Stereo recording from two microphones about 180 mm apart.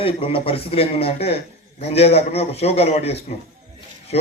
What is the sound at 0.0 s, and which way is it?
A man's voice, 30° left (ahead or behind).